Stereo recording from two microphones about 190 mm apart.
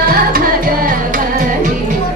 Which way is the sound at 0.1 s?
50° right (ahead or behind).